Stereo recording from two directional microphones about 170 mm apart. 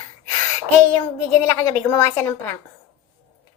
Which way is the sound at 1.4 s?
15° left (ahead or behind).